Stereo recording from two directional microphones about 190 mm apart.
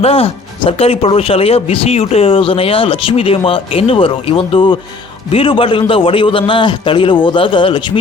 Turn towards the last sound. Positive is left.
turn(degrees=25)  # may be behind; listen again after turning